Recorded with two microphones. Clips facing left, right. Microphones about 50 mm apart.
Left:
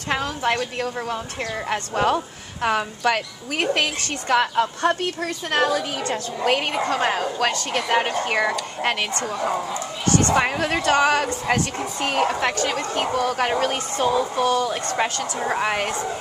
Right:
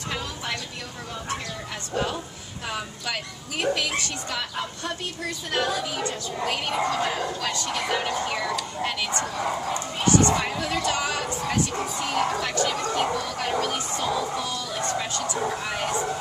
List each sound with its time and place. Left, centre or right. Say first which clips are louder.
0.1 s a sound: left 10 dB; left
1.7 s speech: left 8 dB; left
10.3 s speech: left 5 dB; left